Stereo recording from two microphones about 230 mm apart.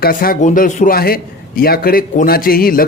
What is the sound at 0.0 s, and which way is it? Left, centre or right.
A man's voice, left.